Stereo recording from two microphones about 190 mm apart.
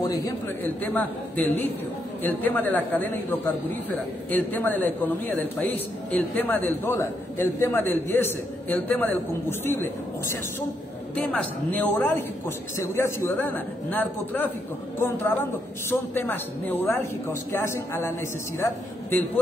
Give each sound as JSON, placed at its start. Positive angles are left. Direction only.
{"t": 0.0, "sound": "a man's voice", "side_deg": 20}
{"t": 15.9, "sound": "a man's voice", "side_deg": 10}